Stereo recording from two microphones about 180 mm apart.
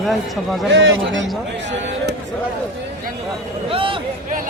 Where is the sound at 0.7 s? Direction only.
90° right.